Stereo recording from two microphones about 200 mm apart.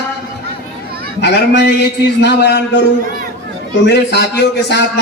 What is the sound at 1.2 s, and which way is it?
A man's voice, 60° left (ahead or behind).